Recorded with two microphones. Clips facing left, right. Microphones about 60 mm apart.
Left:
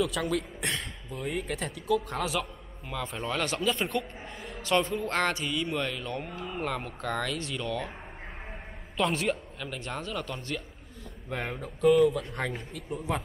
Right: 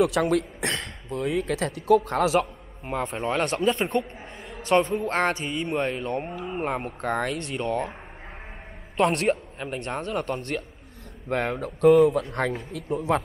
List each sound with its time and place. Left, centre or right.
0.0 s speech: right
3.2 s speech: right
3.4 s speech: right
4.6 s speech: right
8.9 s a man's voice: right
9.3 s speech: right
9.8 s speech: right